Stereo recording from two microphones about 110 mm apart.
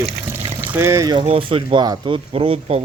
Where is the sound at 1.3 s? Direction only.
60° right (ahead or behind).